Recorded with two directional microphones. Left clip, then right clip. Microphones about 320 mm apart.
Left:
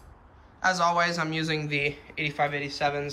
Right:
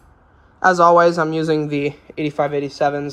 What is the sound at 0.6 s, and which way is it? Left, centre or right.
Speech, centre.